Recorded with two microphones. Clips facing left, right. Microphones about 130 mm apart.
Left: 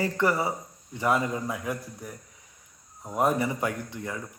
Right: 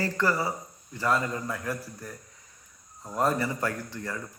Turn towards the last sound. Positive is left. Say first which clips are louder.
# left 1 dB
turn(degrees=10)  # may be behind; listen again after turning